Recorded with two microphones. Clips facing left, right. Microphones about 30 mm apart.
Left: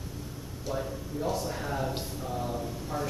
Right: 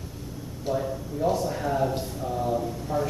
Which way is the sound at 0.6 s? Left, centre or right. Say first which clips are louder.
Right 6 dB; centre.